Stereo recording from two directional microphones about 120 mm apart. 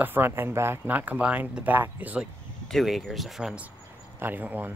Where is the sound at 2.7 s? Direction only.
Centre (ahead or behind).